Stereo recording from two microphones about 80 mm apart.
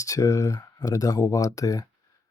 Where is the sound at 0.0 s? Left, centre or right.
Left.